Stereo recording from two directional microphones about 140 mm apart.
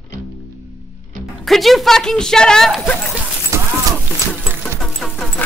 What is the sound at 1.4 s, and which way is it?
A woman's voice, centre (ahead or behind).